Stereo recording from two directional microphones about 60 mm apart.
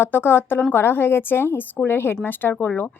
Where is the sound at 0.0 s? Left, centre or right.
Left.